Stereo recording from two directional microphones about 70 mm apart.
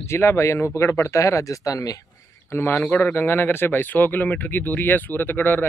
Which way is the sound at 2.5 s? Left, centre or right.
Left.